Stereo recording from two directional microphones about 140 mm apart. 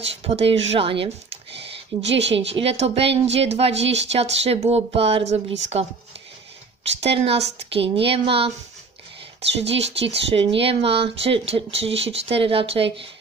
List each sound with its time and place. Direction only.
0.0 s speech: 45° right (ahead or behind)
7.0 s speech: 45° right (ahead or behind)
9.8 s speech: 45° right (ahead or behind)